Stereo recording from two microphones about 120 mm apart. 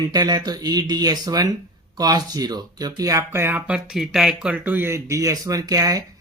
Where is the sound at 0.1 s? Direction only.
35° right (ahead or behind).